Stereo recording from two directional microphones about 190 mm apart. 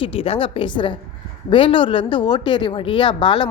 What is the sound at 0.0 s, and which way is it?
Speech, 30° left (ahead or behind).